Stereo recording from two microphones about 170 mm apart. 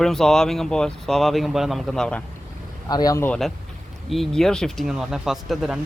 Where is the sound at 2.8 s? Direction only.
20° left (ahead or behind).